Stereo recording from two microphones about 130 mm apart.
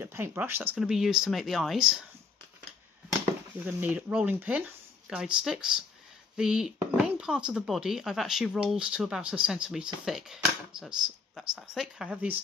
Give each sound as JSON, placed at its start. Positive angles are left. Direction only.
{"t": 0.0, "sound": "speech", "side_deg": -20}
{"t": 0.7, "sound": "speech", "side_deg": -5}
{"t": 3.6, "sound": "speech", "side_deg": -15}